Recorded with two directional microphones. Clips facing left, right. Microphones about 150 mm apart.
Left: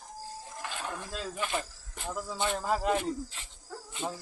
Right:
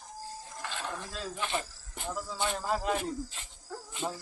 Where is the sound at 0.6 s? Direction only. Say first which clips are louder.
Even; 10° left (ahead or behind).